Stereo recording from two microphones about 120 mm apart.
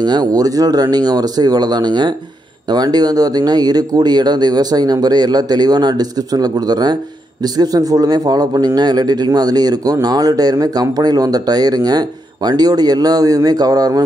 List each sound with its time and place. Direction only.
0.0 s a man's voice: 35° right (ahead or behind)